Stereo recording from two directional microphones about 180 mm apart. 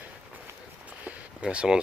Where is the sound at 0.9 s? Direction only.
10° right (ahead or behind).